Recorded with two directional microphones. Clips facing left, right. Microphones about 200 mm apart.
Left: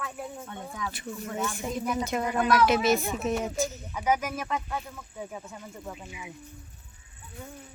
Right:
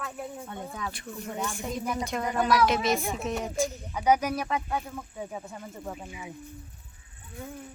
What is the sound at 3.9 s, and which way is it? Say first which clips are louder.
Speech: right 5 dB; 15° right (ahead or behind).